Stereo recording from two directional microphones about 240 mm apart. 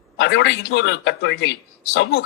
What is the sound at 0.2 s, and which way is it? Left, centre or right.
A man's voice, left.